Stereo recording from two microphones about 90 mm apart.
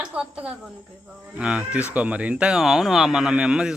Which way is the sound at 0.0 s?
10° right (ahead or behind).